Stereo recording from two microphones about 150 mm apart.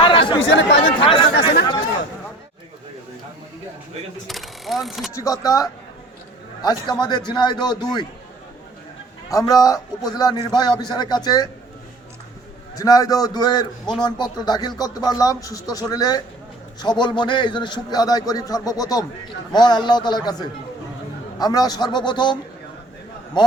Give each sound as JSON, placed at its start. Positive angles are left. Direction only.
{"t": 0.0, "sound": "chatter", "side_deg": 35}
{"t": 1.0, "sound": "speech", "side_deg": 35}
{"t": 4.3, "sound": "mechanisms", "side_deg": 0}
{"t": 5.1, "sound": "a man's voice", "side_deg": 20}
{"t": 9.3, "sound": "a man's voice", "side_deg": 25}
{"t": 12.7, "sound": "a man's voice", "side_deg": 25}